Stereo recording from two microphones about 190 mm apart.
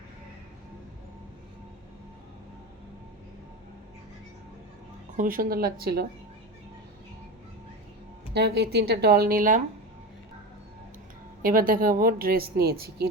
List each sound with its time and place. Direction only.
5.1 s a woman's voice: 45° right (ahead or behind)
8.3 s speech: 60° right (ahead or behind); by 9.6 s 45° right (ahead or behind)
11.4 s a woman's voice: 50° right (ahead or behind)